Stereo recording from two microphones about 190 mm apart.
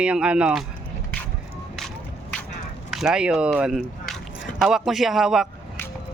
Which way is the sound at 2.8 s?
Centre (ahead or behind).